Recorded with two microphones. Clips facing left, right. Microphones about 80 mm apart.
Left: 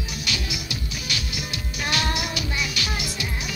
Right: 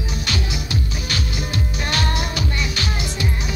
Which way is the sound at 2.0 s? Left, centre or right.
Centre.